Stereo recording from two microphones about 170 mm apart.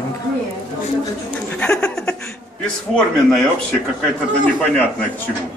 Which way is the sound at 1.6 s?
5° left (ahead or behind).